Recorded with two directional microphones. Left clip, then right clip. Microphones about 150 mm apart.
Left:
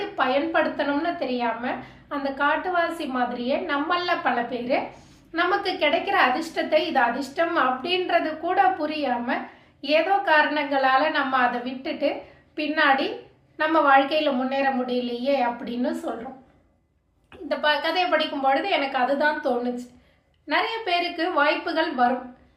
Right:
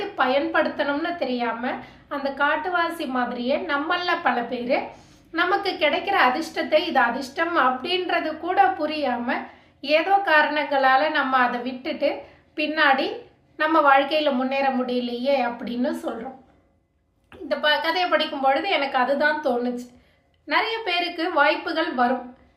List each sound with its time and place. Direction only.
0.2 s a woman's voice: 15° right (ahead or behind)
17.5 s a woman's voice: 15° right (ahead or behind)